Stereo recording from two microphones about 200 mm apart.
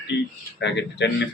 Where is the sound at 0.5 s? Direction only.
60° left (ahead or behind).